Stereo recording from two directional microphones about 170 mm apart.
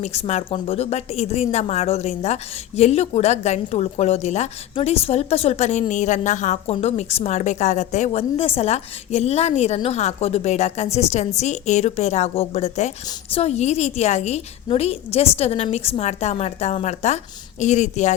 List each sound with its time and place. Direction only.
0.0 s a woman's voice: 40° left (ahead or behind)